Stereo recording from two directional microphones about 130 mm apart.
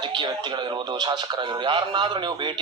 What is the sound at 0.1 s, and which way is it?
Radio, 35° right (ahead or behind).